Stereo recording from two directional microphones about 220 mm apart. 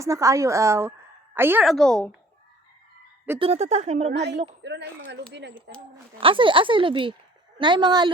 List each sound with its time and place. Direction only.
0.0 s a woman's voice: 15° right (ahead or behind); by 2.0 s centre (ahead or behind)
3.3 s a woman's voice: 25° right (ahead or behind)
4.1 s speech: 50° right (ahead or behind)
6.1 s a woman's voice: 25° right (ahead or behind)